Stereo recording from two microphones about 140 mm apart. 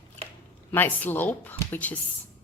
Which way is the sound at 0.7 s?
15° left (ahead or behind).